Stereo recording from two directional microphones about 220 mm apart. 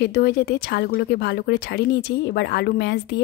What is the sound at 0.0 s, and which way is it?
A woman's voice, 50° left (ahead or behind).